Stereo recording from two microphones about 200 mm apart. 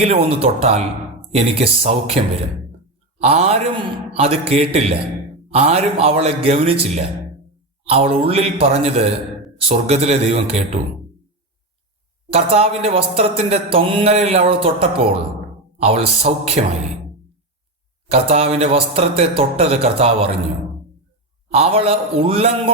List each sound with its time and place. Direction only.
0.0 s speech: 30° right (ahead or behind)
12.3 s speech: 30° right (ahead or behind)
18.1 s speech: 30° right (ahead or behind)
21.5 s speech: 30° right (ahead or behind)